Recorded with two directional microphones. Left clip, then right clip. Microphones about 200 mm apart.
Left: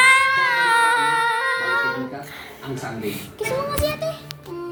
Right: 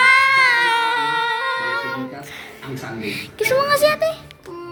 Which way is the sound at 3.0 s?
30° right (ahead or behind).